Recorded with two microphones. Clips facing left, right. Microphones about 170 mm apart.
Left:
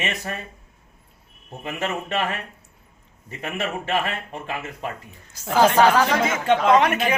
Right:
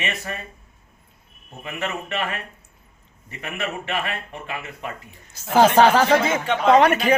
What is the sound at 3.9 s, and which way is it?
Speech, 40° left (ahead or behind).